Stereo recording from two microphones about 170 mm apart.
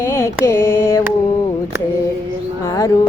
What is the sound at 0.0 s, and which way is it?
Carnatic music, 15° left (ahead or behind).